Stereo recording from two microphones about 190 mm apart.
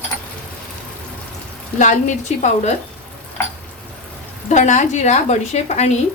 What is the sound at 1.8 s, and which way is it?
Speech, 40° left (ahead or behind).